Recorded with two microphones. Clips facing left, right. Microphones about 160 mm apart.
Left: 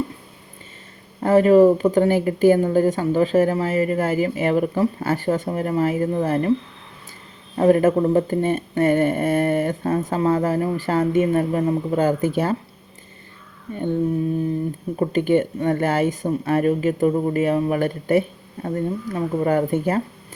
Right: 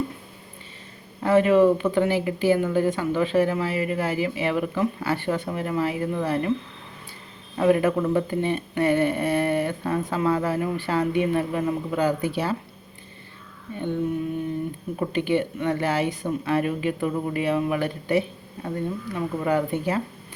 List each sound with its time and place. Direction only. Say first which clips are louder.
1.2 s a woman's voice: left 4 dB; 40° left (ahead or behind)
7.5 s speech: left 4 dB; 40° left (ahead or behind)
14.9 s speech: left 5 dB; 45° left (ahead or behind)